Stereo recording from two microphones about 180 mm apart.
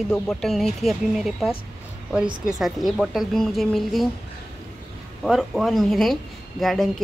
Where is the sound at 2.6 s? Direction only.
Centre (ahead or behind).